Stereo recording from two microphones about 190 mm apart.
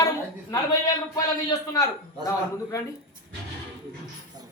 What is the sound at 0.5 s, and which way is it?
A man's voice, 20° left (ahead or behind).